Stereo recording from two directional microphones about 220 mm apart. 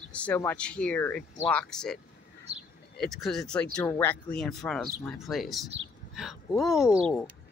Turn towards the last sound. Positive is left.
turn(degrees=5)  # may be behind; listen again after turning